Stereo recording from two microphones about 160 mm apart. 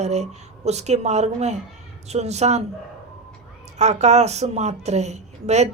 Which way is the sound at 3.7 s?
45° right (ahead or behind).